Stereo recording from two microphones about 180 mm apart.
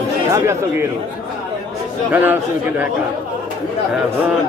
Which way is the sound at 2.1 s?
10° right (ahead or behind).